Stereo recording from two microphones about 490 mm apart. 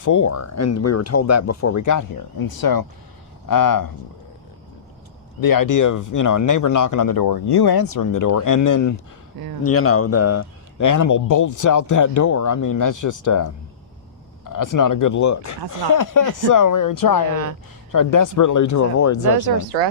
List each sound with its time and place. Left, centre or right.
0.0 s a man's voice: left
5.4 s a man's voice: left